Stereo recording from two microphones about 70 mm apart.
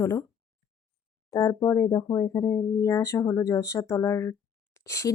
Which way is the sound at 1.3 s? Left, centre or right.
Left.